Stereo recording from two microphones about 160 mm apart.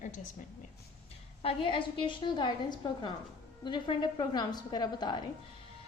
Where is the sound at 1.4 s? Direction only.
35° left (ahead or behind).